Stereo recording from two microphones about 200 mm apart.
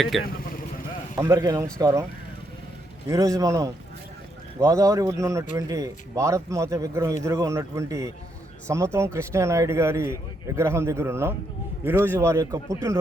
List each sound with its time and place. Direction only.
0.1 s speech: centre (ahead or behind)
1.1 s a man's voice: 15° right (ahead or behind)
3.1 s speech: 15° right (ahead or behind)